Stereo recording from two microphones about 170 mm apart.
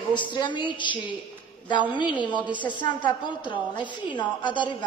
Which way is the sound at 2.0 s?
25° left (ahead or behind).